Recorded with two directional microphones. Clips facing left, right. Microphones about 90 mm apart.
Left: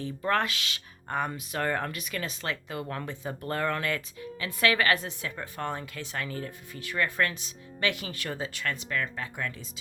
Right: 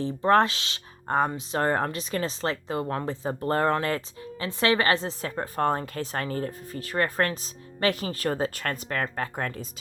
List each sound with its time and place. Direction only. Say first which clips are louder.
0.0 s speech: right 7 dB; 35° right (ahead or behind)